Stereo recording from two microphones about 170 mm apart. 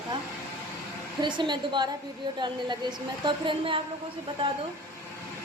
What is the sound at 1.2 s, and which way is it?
A woman's voice, 25° right (ahead or behind).